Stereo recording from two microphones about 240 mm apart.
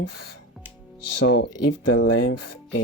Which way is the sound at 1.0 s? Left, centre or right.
Left.